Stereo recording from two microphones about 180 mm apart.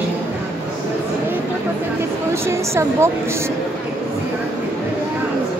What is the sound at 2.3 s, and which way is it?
Speech, 15° right (ahead or behind).